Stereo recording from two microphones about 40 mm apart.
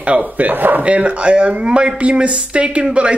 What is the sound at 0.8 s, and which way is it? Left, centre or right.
Speech, right.